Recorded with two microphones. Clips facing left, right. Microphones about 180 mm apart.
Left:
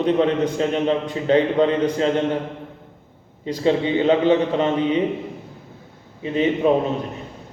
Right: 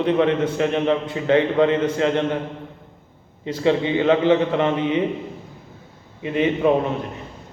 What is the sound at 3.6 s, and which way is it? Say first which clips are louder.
Speech: even; 30° left (ahead or behind).